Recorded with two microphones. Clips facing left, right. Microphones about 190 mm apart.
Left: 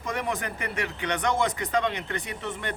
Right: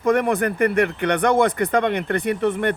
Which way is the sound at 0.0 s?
60° right (ahead or behind).